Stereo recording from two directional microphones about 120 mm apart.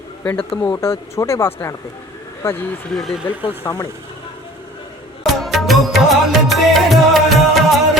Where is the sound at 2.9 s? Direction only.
Centre (ahead or behind).